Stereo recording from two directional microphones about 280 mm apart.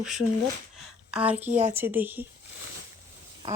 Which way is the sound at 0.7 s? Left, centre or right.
Centre.